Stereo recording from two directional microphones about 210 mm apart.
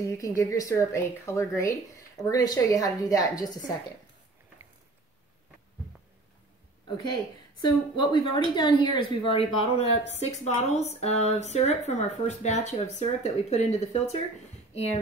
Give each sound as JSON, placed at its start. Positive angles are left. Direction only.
{"t": 0.0, "sound": "speech", "side_deg": 15}
{"t": 7.6, "sound": "a woman's voice", "side_deg": 20}